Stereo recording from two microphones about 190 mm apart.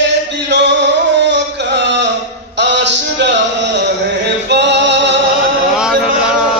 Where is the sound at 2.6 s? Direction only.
65° right (ahead or behind).